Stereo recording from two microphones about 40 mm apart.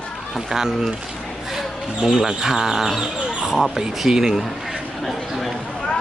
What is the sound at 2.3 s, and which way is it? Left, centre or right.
Speech, centre.